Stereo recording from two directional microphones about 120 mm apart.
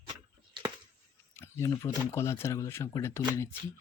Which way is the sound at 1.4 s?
25° left (ahead or behind).